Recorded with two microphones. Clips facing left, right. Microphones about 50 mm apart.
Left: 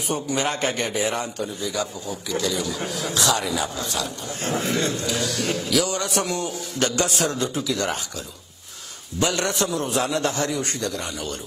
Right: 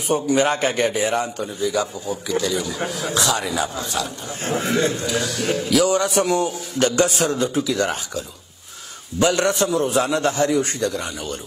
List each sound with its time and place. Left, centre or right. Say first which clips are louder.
0.1 s a man's voice: right 7 dB; centre
9.2 s a man's voice: right 5 dB; centre